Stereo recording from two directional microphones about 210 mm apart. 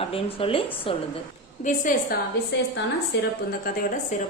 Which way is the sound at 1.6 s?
40° left (ahead or behind).